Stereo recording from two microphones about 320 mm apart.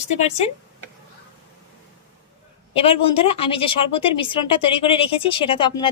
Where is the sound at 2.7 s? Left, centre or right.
Centre.